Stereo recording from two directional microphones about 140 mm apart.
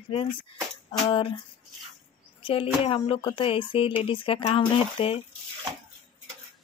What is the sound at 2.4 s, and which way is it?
Speech, 40° left (ahead or behind).